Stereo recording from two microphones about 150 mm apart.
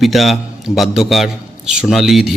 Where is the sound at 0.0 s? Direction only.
Centre (ahead or behind).